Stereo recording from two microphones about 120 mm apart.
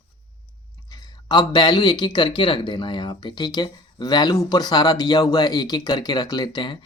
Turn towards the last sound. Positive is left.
turn(degrees=40)  # may be behind; listen again after turning